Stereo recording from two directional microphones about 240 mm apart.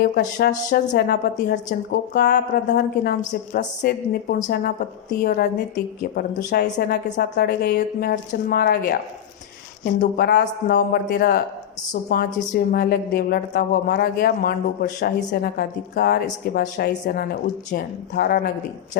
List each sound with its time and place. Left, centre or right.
0.0 s a woman's voice: left